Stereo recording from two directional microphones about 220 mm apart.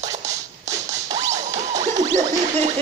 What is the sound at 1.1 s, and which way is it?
Music, 30° right (ahead or behind).